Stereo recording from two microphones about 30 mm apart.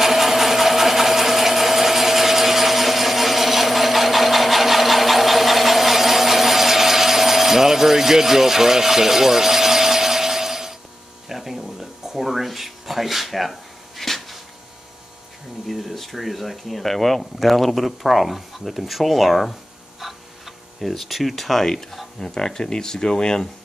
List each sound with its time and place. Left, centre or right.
0.0 s wood: centre
11.2 s a sound: centre
15.7 s speech: centre
20.0 s tick-tock: centre
22.2 s speech: left